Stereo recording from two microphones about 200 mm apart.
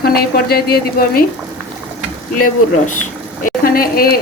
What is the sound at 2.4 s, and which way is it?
A woman's voice, 40° left (ahead or behind).